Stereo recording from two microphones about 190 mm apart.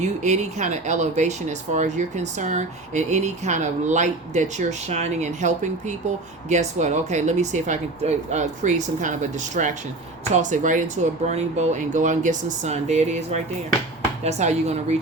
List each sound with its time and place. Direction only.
0.0 s speech: 40° right (ahead or behind)